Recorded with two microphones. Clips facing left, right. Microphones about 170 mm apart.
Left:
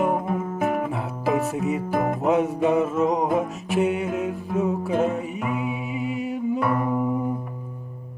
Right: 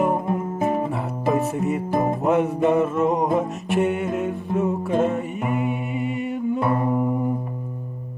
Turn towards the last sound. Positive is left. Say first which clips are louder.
# right 1 dB
turn(degrees=-25)  # may be behind; listen again after turning